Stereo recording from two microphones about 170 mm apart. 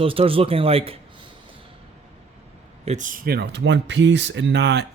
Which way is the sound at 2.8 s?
50° right (ahead or behind).